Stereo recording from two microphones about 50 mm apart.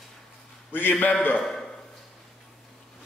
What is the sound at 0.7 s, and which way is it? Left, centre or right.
Speech, left.